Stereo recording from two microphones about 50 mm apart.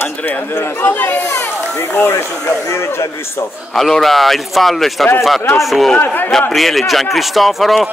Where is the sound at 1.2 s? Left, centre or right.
Left.